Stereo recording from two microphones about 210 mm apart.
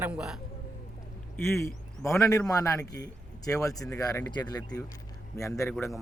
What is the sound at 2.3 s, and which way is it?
Speech, 15° left (ahead or behind).